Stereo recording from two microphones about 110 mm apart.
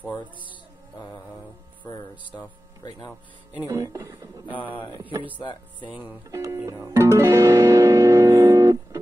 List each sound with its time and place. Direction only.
0.0 s music: 15° left (ahead or behind)
0.9 s mantra: 30° left (ahead or behind)
3.6 s speech: 30° right (ahead or behind)
4.5 s speech: 50° left (ahead or behind)
5.9 s music: 15° right (ahead or behind)
6.3 s music: 30° right (ahead or behind)